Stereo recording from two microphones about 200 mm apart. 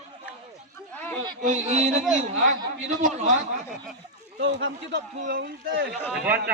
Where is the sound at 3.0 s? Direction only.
35° right (ahead or behind).